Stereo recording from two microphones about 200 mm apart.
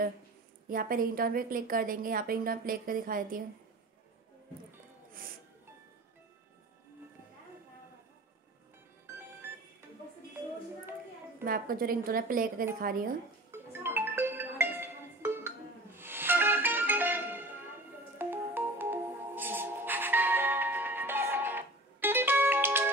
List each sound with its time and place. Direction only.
0.7 s a woman's voice: 45° right (ahead or behind)
11.4 s a woman's voice: 45° right (ahead or behind)
13.5 s music: 10° right (ahead or behind)